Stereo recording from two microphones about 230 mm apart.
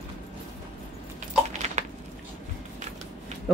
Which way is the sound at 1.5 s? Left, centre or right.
Right.